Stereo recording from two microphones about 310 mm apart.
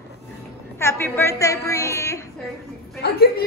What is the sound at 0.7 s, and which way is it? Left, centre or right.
A woman's voice, centre.